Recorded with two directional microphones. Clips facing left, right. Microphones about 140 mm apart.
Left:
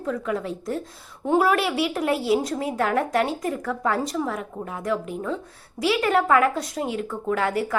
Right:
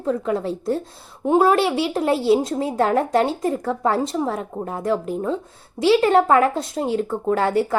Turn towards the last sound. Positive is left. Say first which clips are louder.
# right 4 dB
turn(degrees=-30)  # may be behind; listen again after turning